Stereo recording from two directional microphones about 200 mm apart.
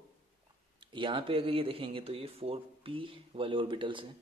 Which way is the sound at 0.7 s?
25° right (ahead or behind).